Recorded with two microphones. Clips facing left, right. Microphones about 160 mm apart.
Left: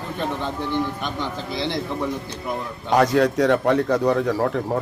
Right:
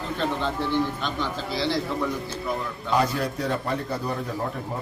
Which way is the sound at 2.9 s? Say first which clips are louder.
Left 7 dB; 85° left.